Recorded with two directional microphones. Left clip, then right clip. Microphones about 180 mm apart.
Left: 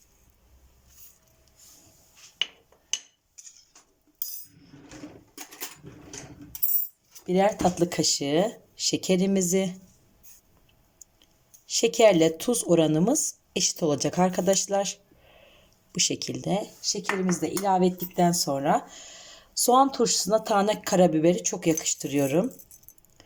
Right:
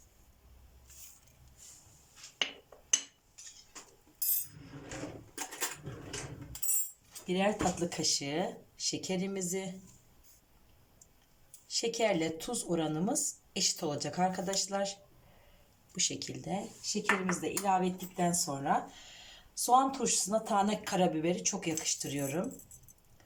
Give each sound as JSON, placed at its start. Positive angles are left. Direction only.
{"t": 7.3, "sound": "speech", "side_deg": 50}
{"t": 11.7, "sound": "speech", "side_deg": 40}
{"t": 16.0, "sound": "speech", "side_deg": 35}
{"t": 17.7, "sound": "speech", "side_deg": 50}